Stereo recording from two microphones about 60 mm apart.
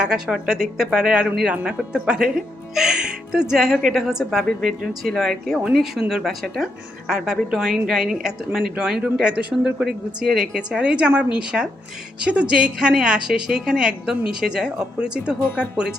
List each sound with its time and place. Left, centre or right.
0.0 s a woman's voice: centre
9.3 s a woman's voice: centre